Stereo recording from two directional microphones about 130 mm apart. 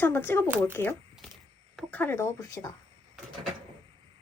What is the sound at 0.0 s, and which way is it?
Speech, 15° left (ahead or behind).